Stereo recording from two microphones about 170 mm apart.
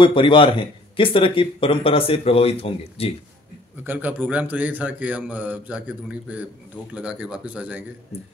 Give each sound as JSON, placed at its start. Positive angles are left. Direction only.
{"t": 0.0, "sound": "speech", "side_deg": 30}
{"t": 3.8, "sound": "a man's voice", "side_deg": -10}